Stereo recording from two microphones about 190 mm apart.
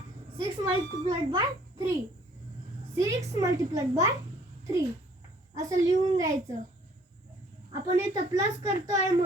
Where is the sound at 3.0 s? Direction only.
15° right (ahead or behind).